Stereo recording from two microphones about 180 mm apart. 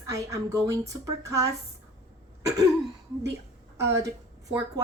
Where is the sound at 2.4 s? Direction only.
20° right (ahead or behind).